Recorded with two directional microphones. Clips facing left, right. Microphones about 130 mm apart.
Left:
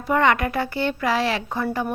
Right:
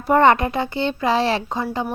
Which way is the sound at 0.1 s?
35° right (ahead or behind).